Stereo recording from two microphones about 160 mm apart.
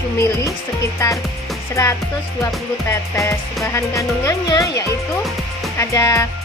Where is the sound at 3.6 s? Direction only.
20° left (ahead or behind).